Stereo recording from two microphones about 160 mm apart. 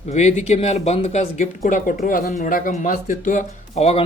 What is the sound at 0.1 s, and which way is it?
Speech, 45° left (ahead or behind).